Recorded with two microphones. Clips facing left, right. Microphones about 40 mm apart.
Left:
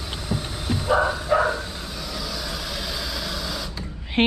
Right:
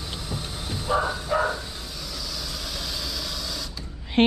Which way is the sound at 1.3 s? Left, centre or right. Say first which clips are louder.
Left 4 dB; left.